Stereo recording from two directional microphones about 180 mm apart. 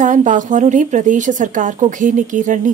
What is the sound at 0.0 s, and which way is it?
A woman's voice, 45° right (ahead or behind).